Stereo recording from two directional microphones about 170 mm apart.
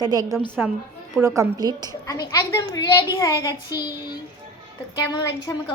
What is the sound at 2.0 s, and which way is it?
A woman's voice, 20° left (ahead or behind).